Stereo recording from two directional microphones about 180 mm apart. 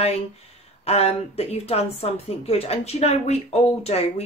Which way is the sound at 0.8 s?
35° left (ahead or behind).